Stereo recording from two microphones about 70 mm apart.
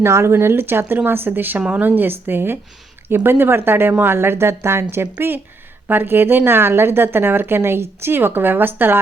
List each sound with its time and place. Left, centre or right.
0.0 s a woman's voice: right